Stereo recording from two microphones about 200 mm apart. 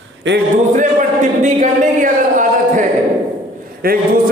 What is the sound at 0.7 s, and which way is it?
A man's voice, 40° right (ahead or behind).